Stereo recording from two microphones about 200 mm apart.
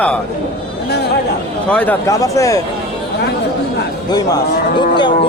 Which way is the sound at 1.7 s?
5° left (ahead or behind).